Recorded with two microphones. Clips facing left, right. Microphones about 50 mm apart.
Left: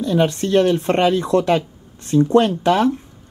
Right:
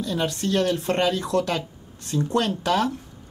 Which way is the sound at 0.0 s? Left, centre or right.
Left.